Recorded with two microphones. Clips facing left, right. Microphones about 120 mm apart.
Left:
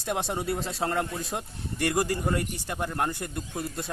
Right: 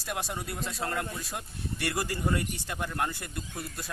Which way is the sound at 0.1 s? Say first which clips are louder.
Left 6 dB; 25° left (ahead or behind).